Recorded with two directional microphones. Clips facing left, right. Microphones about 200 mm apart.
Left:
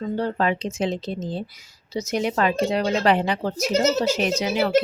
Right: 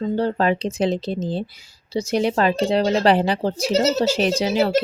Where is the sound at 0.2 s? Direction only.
35° right (ahead or behind).